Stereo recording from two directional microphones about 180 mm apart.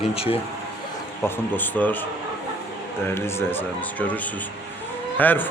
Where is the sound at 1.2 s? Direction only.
10° left (ahead or behind).